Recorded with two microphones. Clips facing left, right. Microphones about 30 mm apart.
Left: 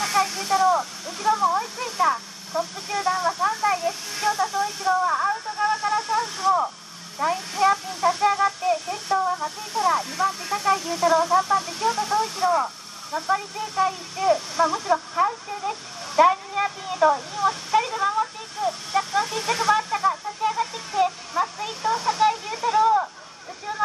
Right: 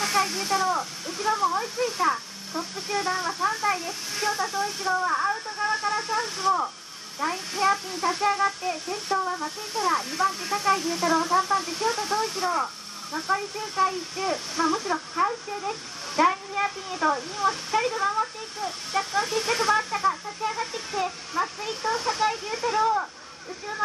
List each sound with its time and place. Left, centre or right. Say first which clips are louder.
0.0 s a sound: left 2 dB; centre
2.0 s speech: left 7 dB; centre
4.6 s speech: left 4 dB; centre
5.0 s a sound: left 2 dB; centre
5.9 s radio: left 3 dB; centre
7.2 s speech: left 4 dB; centre
8.2 s speech: left 3 dB; centre
17.1 s speech: left 3 dB; centre
19.2 s a sound: left 2 dB; centre